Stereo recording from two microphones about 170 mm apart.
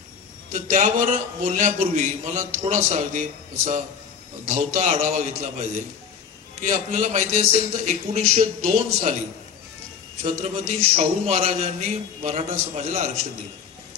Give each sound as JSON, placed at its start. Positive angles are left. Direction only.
{"t": 0.5, "sound": "a man's voice", "side_deg": -45}
{"t": 10.2, "sound": "a man's voice", "side_deg": -40}